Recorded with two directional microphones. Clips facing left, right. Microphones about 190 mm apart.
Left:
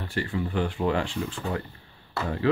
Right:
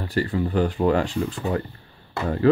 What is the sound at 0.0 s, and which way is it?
Speech, 40° right (ahead or behind).